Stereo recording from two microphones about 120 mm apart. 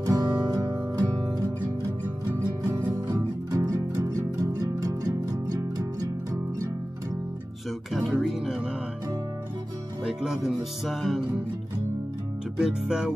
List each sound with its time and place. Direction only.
0.0 s music: 30° right (ahead or behind)
2.9 s music: 30° right (ahead or behind)
7.9 s music: centre (ahead or behind)
10.0 s speech: 5° right (ahead or behind)
12.5 s speech: 5° right (ahead or behind)